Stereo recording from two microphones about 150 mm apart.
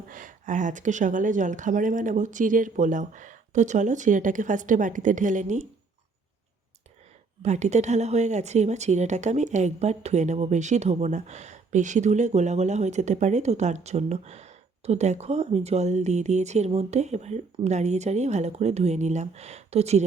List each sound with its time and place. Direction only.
0.1 s speech: 60° right (ahead or behind)
7.4 s a woman's voice: 50° right (ahead or behind)